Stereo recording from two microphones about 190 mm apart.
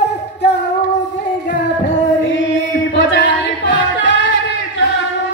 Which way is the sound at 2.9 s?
65° left (ahead or behind).